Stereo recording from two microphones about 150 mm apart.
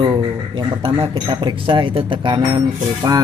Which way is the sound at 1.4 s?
35° right (ahead or behind).